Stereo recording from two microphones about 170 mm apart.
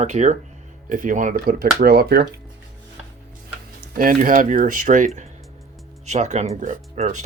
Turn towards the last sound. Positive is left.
turn(degrees=-45)  # may be behind; listen again after turning